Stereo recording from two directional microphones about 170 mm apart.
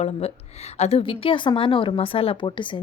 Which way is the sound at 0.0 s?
40° left (ahead or behind).